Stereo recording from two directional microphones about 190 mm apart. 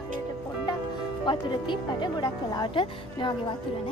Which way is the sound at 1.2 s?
25° left (ahead or behind).